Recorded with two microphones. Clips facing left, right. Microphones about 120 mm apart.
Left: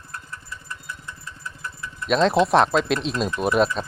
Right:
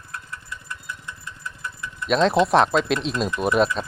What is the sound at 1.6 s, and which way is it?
Speech, centre (ahead or behind).